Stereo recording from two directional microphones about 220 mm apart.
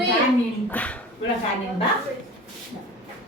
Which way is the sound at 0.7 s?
5° left (ahead or behind).